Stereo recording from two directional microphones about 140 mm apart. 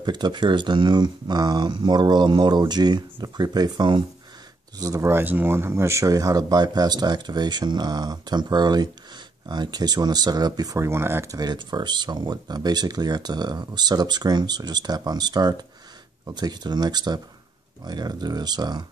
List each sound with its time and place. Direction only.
0.0 s speech: 30° right (ahead or behind)
11.3 s speech: 30° right (ahead or behind)